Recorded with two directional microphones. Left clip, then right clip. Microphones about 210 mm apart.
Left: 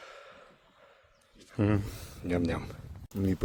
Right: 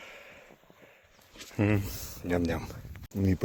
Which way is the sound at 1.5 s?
5° left (ahead or behind).